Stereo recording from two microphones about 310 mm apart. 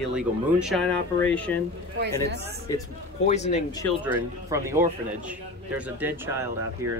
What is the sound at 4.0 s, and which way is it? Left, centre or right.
Speech, centre.